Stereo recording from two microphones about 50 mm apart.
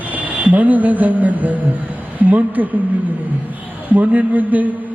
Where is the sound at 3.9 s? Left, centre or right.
Right.